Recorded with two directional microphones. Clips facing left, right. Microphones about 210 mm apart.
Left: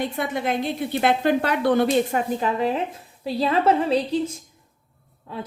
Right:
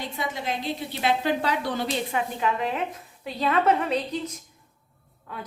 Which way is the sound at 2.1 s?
35° left (ahead or behind).